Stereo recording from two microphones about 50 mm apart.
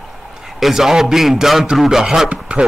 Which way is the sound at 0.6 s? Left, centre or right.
Centre.